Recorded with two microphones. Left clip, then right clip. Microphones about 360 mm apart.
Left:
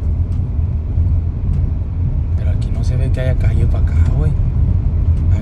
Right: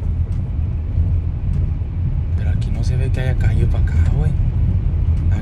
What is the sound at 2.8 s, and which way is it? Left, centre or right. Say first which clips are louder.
Speech: left 4 dB; centre.